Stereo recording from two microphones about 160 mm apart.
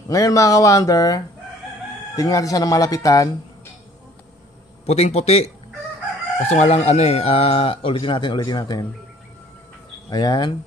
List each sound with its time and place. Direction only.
0.1 s speech: 20° left (ahead or behind)
4.8 s speech: 40° left (ahead or behind); by 8.8 s 25° left (ahead or behind)
10.0 s speech: 25° left (ahead or behind)